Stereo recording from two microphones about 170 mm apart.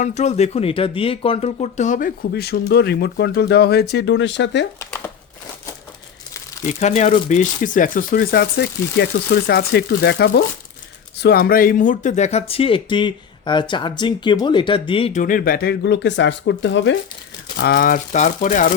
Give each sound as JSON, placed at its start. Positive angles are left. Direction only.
{"t": 0.0, "sound": "speech", "side_deg": 45}
{"t": 4.8, "sound": "crumpling", "side_deg": 15}
{"t": 6.7, "sound": "speech", "side_deg": 40}
{"t": 11.2, "sound": "speech", "side_deg": 65}
{"t": 15.1, "sound": "speech", "side_deg": 50}
{"t": 17.6, "sound": "speech", "side_deg": 65}